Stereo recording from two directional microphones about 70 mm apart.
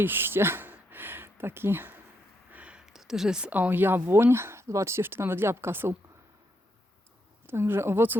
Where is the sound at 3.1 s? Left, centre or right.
Centre.